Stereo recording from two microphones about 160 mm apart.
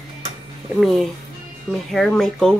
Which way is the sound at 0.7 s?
Centre (ahead or behind).